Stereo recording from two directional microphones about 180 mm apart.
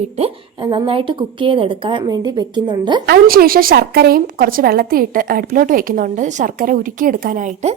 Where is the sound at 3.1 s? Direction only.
55° right (ahead or behind).